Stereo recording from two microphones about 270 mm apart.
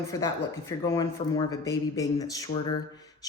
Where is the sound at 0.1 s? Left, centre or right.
Centre.